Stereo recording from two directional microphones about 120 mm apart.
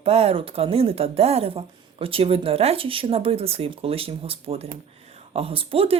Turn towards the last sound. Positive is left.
turn(degrees=-50)  # may be behind; listen again after turning